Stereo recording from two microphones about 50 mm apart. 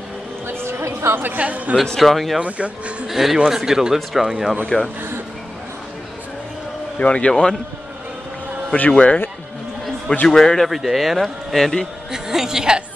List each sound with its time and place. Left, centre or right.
0.5 s a sound: right
1.1 s speech: right
2.0 s speech: centre
2.4 s speech: right
3.1 s speech: centre
4.6 s a man's voice: centre
7.0 s speech: left
8.9 s speech: left
10.2 s a man's voice: centre
10.7 s speech: centre
12.1 s speech: centre